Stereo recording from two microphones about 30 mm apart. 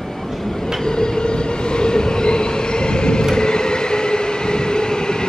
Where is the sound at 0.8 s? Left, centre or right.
Left.